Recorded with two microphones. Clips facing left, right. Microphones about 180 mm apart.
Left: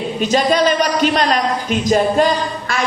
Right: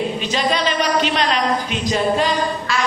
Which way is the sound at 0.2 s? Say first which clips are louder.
Left 6 dB; 45° left (ahead or behind).